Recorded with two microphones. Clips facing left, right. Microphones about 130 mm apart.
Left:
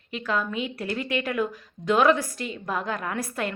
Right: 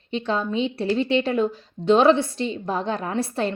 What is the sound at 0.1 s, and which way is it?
A woman's voice, 30° right (ahead or behind).